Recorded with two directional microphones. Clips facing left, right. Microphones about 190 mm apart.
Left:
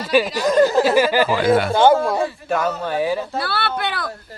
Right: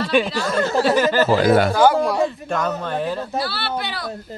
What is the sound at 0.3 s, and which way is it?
Speech, 15° left (ahead or behind).